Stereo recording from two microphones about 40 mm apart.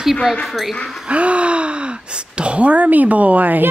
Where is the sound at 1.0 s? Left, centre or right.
Right.